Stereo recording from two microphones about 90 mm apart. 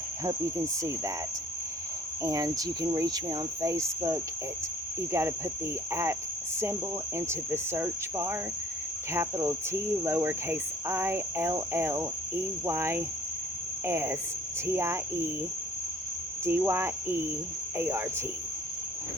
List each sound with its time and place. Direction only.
0.3 s cricket: 35° right (ahead or behind)
2.2 s cricket: 40° right (ahead or behind)
7.2 s cricket: 30° right (ahead or behind)
16.5 s cricket: 25° right (ahead or behind)